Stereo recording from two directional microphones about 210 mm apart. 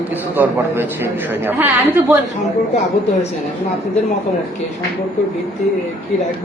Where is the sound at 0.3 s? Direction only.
10° right (ahead or behind).